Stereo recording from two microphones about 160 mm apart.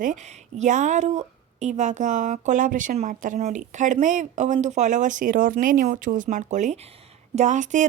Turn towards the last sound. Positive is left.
turn(degrees=-50)  # may be behind; listen again after turning